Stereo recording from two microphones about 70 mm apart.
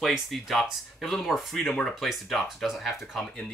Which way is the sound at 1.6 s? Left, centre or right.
Centre.